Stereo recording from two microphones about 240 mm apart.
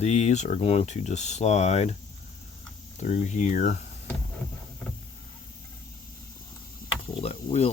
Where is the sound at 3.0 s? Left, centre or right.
Left.